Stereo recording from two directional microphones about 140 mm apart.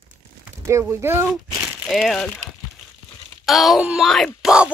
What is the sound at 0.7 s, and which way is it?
Speech, 20° right (ahead or behind).